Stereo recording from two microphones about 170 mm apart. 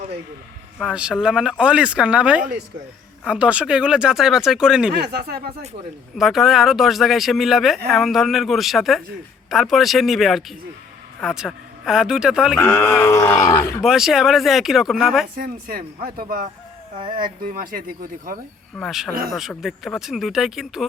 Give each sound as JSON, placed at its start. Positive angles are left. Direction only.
{"t": 0.8, "sound": "speech", "side_deg": -5}
{"t": 4.9, "sound": "speech", "side_deg": -75}
{"t": 6.1, "sound": "speech", "side_deg": 0}
{"t": 12.5, "sound": "speech", "side_deg": 15}
{"t": 13.8, "sound": "speech", "side_deg": -5}
{"t": 15.4, "sound": "speech", "side_deg": -60}
{"t": 18.8, "sound": "speech", "side_deg": 0}